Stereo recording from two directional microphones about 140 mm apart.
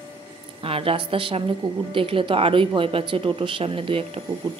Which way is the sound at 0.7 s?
40° right (ahead or behind).